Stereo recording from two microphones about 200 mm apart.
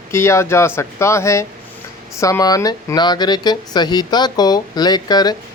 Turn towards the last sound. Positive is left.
turn(degrees=20)  # may be behind; listen again after turning